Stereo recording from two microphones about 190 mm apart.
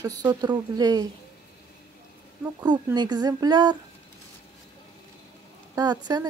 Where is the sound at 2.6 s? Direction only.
20° right (ahead or behind).